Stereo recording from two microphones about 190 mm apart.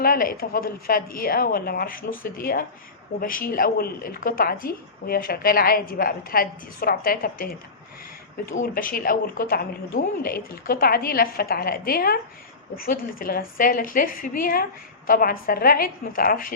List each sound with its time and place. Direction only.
0.0 s a woman's voice: 50° left (ahead or behind)
8.5 s a woman's voice: 45° left (ahead or behind)